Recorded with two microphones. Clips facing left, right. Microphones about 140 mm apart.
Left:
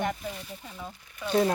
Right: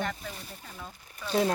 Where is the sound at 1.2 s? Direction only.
35° right (ahead or behind).